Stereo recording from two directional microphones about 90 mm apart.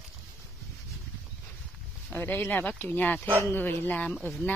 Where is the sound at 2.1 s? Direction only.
20° left (ahead or behind).